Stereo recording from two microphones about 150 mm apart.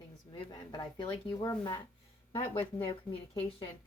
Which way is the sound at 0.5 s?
25° left (ahead or behind).